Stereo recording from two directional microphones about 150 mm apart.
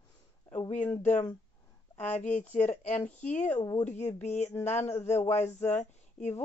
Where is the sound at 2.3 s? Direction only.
50° left (ahead or behind).